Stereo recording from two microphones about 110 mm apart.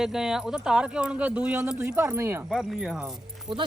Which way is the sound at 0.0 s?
5° right (ahead or behind).